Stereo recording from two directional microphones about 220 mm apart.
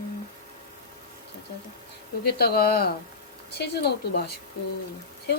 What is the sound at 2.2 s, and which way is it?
A woman's voice, 45° left (ahead or behind).